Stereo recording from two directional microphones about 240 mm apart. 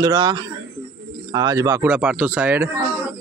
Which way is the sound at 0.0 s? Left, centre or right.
Centre.